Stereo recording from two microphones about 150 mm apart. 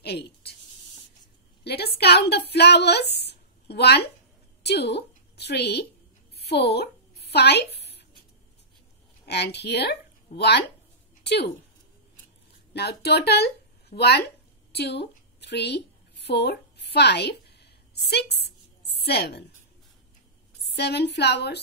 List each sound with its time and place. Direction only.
0.0 s speech: 90° left
1.6 s a sound: 90° left
2.0 s a woman's voice: 90° left
6.3 s a sound: 90° left
9.2 s speech: 90° left
12.7 s speech: 90° left
15.5 s a woman's voice: 90° left
16.3 s a sound: 90° left
20.6 s a woman's voice: 90° left